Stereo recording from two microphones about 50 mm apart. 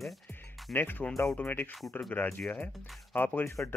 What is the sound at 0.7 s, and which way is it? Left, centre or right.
Speech, left.